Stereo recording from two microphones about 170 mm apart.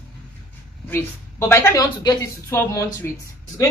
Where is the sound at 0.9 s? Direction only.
15° left (ahead or behind).